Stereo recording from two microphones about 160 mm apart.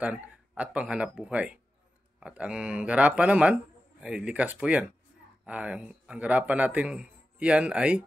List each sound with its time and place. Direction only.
0.0 s speech: 10° right (ahead or behind)